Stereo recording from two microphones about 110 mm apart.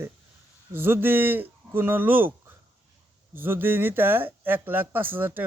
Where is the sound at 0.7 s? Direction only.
20° right (ahead or behind).